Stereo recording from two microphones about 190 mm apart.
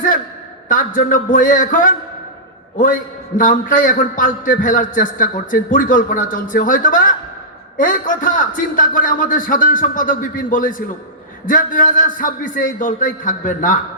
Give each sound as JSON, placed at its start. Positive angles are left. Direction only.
{"t": 0.7, "sound": "a man's voice", "side_deg": 45}